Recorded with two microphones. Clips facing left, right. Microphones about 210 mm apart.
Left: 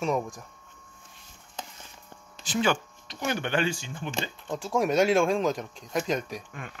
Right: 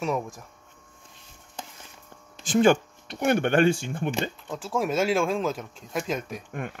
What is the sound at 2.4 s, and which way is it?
Speech, 50° right (ahead or behind).